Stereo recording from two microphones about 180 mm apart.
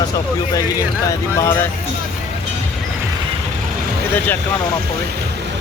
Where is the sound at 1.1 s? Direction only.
15° left (ahead or behind).